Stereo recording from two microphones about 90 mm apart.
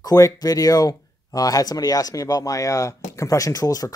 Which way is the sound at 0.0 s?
40° left (ahead or behind).